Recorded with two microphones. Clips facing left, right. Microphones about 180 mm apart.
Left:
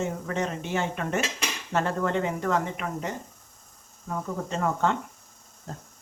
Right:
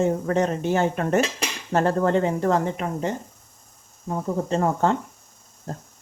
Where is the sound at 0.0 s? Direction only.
35° right (ahead or behind).